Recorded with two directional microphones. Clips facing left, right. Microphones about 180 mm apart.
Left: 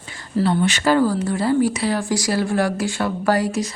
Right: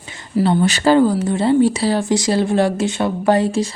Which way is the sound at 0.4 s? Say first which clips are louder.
Right 4 dB; 35° right (ahead or behind).